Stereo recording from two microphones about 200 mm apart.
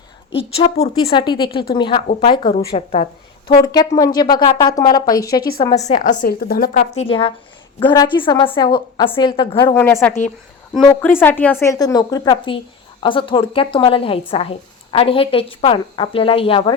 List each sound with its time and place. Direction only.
0.3 s a woman's voice: 30° left (ahead or behind)
3.6 s a woman's voice: 15° left (ahead or behind)
5.8 s a woman's voice: 40° left (ahead or behind)
6.9 s a woman's voice: 30° left (ahead or behind)
9.6 s a woman's voice: 15° left (ahead or behind)